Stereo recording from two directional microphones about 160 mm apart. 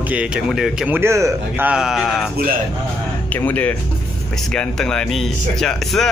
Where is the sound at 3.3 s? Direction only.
10° left (ahead or behind).